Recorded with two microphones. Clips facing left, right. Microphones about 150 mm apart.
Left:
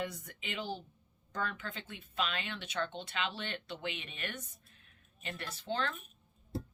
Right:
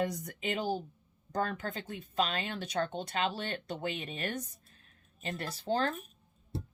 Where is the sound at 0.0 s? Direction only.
40° right (ahead or behind).